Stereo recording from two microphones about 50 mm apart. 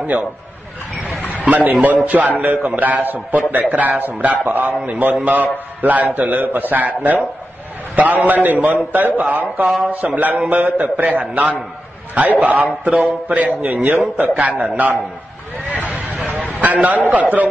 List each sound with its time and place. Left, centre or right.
1.4 s a man's voice: right
16.6 s a man's voice: right